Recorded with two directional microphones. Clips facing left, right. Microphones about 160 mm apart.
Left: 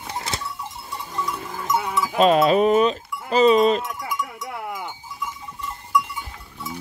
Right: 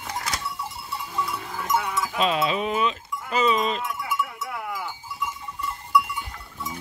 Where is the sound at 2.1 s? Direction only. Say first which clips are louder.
Left 9 dB; 45° left (ahead or behind).